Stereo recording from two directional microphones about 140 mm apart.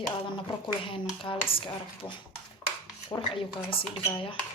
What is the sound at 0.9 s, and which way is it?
Speech, 40° left (ahead or behind).